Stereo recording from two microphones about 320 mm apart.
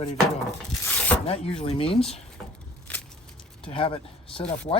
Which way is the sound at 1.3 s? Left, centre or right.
Centre.